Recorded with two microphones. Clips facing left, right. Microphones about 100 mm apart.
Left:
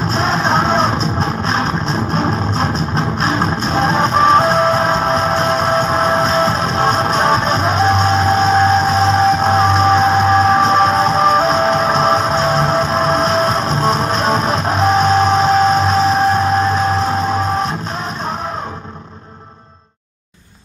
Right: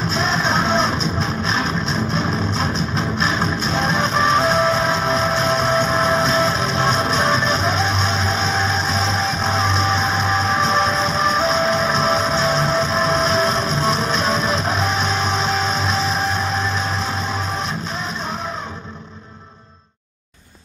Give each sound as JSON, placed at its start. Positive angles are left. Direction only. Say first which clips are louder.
{"t": 0.1, "sound": "music", "louder": "left 5 dB", "side_deg": 40}